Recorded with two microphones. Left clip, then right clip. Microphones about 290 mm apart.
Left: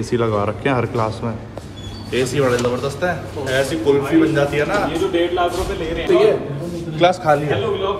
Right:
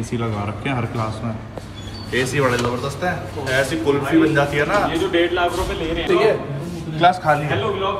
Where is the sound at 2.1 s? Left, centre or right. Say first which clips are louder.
Left 1 dB; centre.